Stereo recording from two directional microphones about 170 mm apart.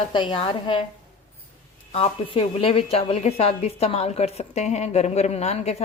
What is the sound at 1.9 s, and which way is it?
A woman's voice, 35° left (ahead or behind).